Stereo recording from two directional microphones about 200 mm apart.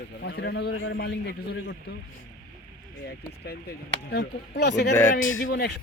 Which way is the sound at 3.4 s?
55° left (ahead or behind).